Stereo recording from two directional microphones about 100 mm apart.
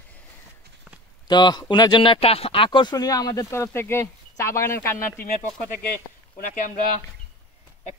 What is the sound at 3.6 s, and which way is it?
Speech, 25° left (ahead or behind).